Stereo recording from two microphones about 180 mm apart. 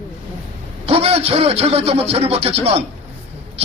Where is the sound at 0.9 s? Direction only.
35° right (ahead or behind).